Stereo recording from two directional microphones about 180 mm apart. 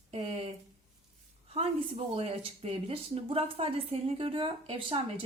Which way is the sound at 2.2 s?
35° right (ahead or behind).